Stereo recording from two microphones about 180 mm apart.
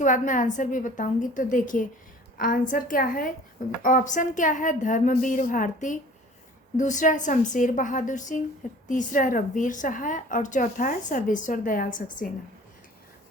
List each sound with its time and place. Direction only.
0.0 s a woman's voice: 45° left (ahead or behind)